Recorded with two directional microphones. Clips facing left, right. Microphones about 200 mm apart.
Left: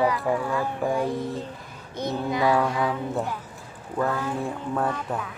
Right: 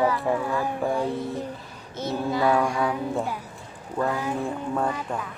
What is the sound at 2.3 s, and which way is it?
Child singing, 15° left (ahead or behind).